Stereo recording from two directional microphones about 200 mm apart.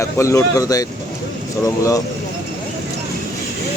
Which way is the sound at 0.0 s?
15° left (ahead or behind).